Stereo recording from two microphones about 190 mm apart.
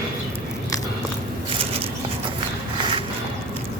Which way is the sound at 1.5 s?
30° right (ahead or behind).